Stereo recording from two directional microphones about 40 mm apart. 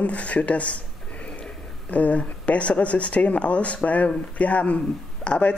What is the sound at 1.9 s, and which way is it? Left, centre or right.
Speech, left.